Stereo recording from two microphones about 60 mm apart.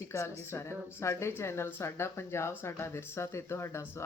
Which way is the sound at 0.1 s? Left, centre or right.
Left.